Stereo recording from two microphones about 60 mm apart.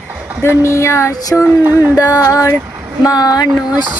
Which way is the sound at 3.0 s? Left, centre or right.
Left.